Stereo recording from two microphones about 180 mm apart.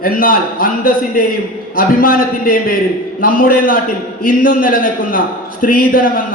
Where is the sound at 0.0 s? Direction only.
50° left (ahead or behind).